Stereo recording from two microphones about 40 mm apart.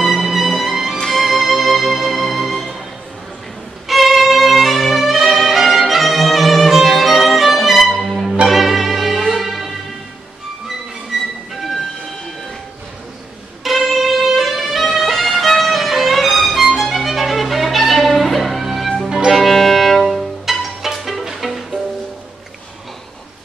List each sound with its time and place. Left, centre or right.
0.1 s music: centre
3.8 s violin: centre
5.2 s music: centre
5.5 s violin: centre
8.0 s music: centre
8.5 s music: centre
13.7 s violin: centre
18.9 s music: centre
19.3 s music: centre